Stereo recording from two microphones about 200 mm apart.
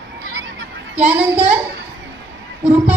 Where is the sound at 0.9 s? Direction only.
5° right (ahead or behind).